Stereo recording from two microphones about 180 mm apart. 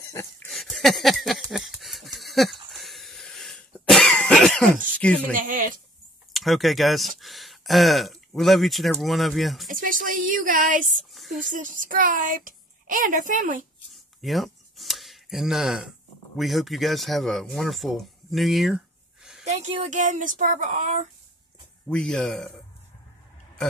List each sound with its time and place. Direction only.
0.1 s a sound: 15° left (ahead or behind)
0.5 s a sound: centre (ahead or behind)
5.3 s a woman's voice: 50° right (ahead or behind)
6.3 s speech: centre (ahead or behind)
9.7 s a woman's voice: 50° right (ahead or behind)
11.1 s a sound: centre (ahead or behind)
11.5 s a woman's voice: 45° right (ahead or behind)
14.2 s speech: centre (ahead or behind)
19.4 s a woman's voice: 40° right (ahead or behind)
21.8 s speech: 5° left (ahead or behind)